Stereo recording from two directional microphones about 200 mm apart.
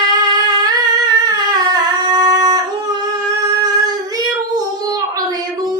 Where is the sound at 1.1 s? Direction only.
20° right (ahead or behind).